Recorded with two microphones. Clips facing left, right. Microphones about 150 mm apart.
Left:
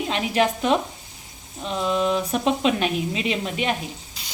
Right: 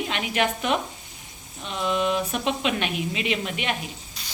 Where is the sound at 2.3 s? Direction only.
35° left (ahead or behind).